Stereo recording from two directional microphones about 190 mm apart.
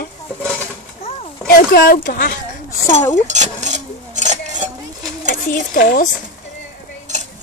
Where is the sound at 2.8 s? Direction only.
15° left (ahead or behind).